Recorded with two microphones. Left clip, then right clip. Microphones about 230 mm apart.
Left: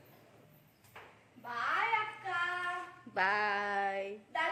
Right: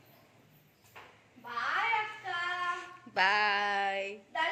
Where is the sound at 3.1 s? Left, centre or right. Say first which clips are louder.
Right 4 dB; centre.